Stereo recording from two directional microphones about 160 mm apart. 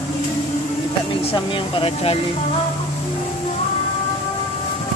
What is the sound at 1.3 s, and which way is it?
Speech, 35° left (ahead or behind).